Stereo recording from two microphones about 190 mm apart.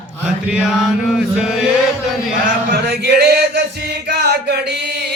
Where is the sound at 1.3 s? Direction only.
5° right (ahead or behind).